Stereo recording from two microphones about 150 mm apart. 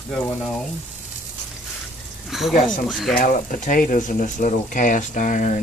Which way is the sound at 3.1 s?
60° left (ahead or behind).